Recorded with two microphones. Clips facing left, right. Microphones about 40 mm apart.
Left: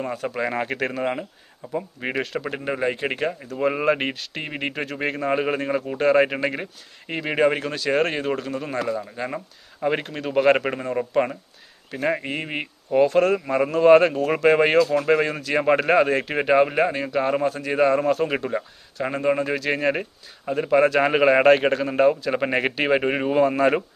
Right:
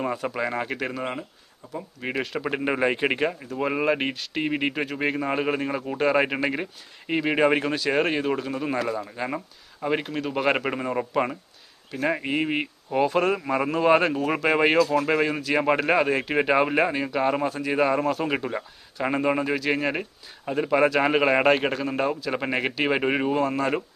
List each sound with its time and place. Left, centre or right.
0.0 s speech: centre
2.1 s speech: centre
2.5 s speech: centre
8.4 s a man's voice: centre
23.3 s speech: centre